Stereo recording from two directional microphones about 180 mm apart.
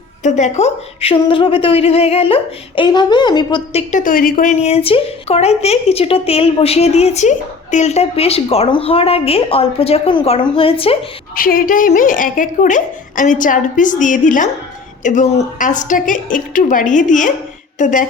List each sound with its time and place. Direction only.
0.2 s a woman's voice: 40° left (ahead or behind)
4.0 s a woman's voice: 50° left (ahead or behind); by 10.9 s 30° left (ahead or behind)
11.3 s a woman's voice: 50° left (ahead or behind)